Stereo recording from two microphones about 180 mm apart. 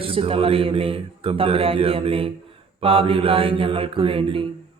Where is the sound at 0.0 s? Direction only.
30° right (ahead or behind).